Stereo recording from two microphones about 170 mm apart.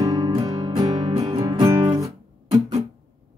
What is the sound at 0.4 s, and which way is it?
Music, 25° right (ahead or behind).